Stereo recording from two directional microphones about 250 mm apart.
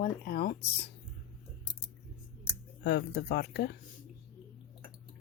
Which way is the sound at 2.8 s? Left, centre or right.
Left.